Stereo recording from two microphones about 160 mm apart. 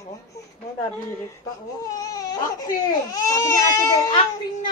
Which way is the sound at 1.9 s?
20° left (ahead or behind).